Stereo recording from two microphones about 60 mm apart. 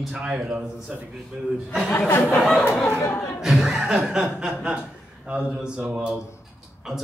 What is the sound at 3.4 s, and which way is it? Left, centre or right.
Music, centre.